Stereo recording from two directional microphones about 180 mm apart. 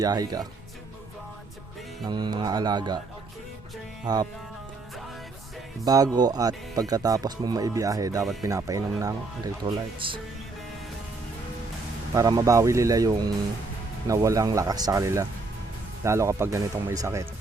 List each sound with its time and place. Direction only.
0.0 s speech: 20° right (ahead or behind)
2.0 s speech: 25° right (ahead or behind)
4.0 s speech: 20° right (ahead or behind)
5.8 s speech: 20° right (ahead or behind)
8.2 s speech: centre (ahead or behind)
8.4 s speech: 20° right (ahead or behind)
12.1 s speech: 20° right (ahead or behind)